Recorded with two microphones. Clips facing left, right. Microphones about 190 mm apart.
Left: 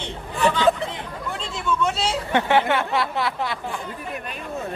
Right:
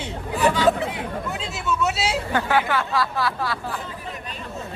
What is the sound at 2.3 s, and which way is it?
Speech, 25° left (ahead or behind).